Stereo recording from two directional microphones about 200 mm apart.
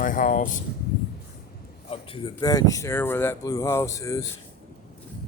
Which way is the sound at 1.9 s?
25° left (ahead or behind).